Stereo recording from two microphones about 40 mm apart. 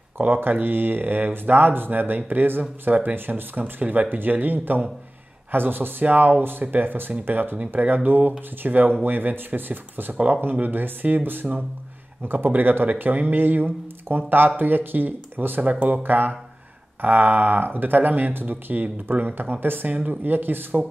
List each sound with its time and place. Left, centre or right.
0.4 s speech: right
6.0 s speech: right
10.1 s speech: right
15.6 s speech: right
16.0 s speech: right
19.9 s speech: right